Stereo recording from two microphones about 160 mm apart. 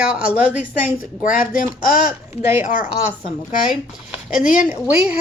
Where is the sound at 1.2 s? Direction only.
60° left (ahead or behind).